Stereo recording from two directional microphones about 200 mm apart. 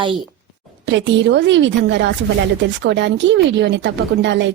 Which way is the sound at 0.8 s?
60° right (ahead or behind).